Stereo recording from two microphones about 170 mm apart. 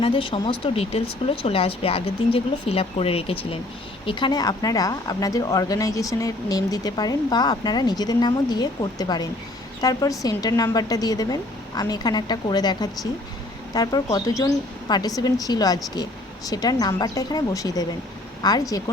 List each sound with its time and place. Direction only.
0.0 s a woman's voice: 30° left (ahead or behind)